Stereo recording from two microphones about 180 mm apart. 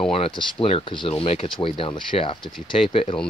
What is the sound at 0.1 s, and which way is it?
Speech, 30° left (ahead or behind).